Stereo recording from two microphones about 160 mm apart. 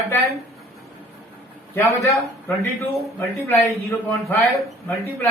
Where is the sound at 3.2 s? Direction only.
20° left (ahead or behind).